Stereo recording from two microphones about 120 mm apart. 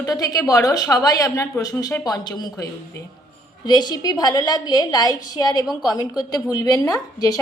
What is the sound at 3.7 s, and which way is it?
A woman's voice, 35° left (ahead or behind).